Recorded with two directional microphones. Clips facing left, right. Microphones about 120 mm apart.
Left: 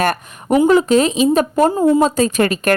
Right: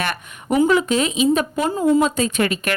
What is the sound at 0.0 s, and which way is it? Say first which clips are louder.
A woman's voice: left 8 dB; 45° left (ahead or behind).